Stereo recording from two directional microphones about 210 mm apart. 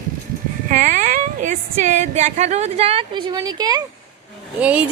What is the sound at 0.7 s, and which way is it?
Speech, 35° right (ahead or behind).